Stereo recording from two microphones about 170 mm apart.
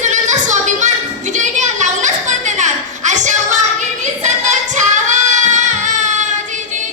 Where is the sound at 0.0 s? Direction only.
45° right (ahead or behind).